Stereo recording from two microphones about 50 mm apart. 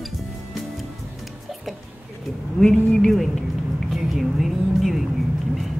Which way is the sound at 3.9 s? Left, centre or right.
Centre.